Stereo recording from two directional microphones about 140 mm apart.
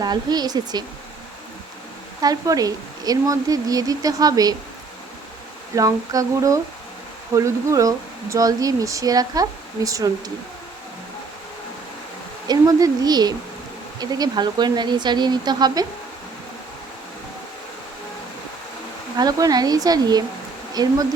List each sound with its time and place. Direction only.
0.0 s speech: 30° right (ahead or behind)
2.2 s speech: 25° right (ahead or behind)
5.7 s speech: 25° right (ahead or behind)
12.5 s speech: 25° right (ahead or behind)
19.1 s speech: 25° right (ahead or behind)